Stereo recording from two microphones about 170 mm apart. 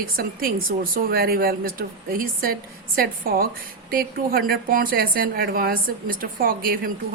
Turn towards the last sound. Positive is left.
turn(degrees=-60)  # may be behind; listen again after turning